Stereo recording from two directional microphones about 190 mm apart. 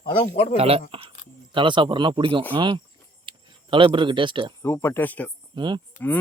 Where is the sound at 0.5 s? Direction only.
30° right (ahead or behind).